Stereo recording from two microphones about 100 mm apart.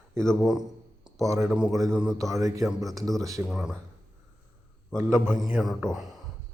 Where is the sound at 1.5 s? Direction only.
5° right (ahead or behind).